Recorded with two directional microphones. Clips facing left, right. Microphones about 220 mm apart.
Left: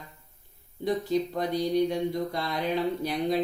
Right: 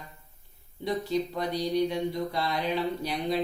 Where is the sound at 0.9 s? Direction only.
50° left (ahead or behind).